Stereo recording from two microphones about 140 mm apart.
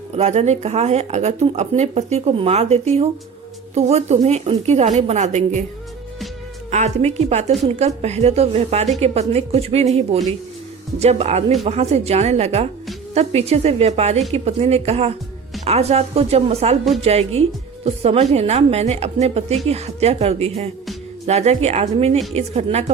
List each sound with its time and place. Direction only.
0.2 s speech: 50° right (ahead or behind)
6.7 s speech: 55° right (ahead or behind)